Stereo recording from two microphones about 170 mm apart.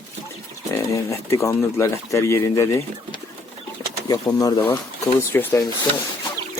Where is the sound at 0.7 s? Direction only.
15° left (ahead or behind).